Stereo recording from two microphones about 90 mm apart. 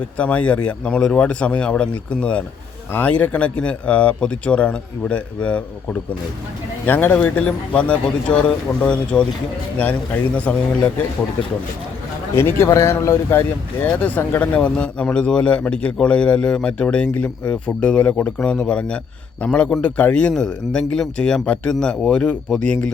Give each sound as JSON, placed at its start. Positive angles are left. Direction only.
{"t": 0.2, "sound": "a man's voice", "side_deg": 15}
{"t": 12.3, "sound": "a man's voice", "side_deg": 25}